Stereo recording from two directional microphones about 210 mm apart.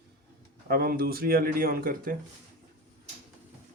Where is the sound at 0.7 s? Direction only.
45° right (ahead or behind).